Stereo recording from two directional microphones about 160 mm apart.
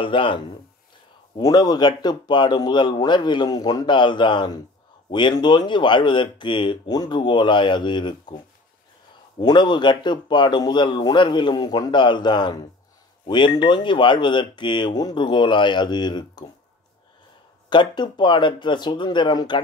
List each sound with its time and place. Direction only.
0.0 s speech: 30° left (ahead or behind)
1.4 s speech: 25° left (ahead or behind)
9.4 s speech: 25° left (ahead or behind)
17.6 s speech: 30° left (ahead or behind)